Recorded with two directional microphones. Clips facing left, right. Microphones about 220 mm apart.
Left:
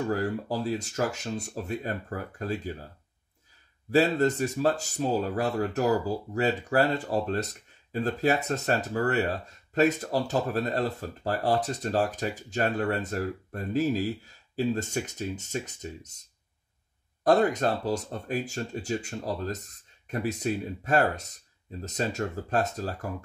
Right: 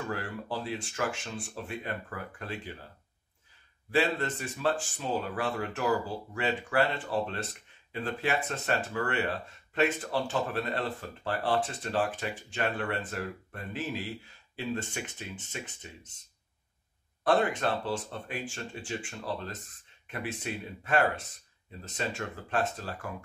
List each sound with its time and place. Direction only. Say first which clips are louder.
0.1 s speech: left 7 dB; 40° left (ahead or behind)
3.9 s speech: left 6 dB; 40° left (ahead or behind)
17.2 s speech: left 4 dB; 40° left (ahead or behind)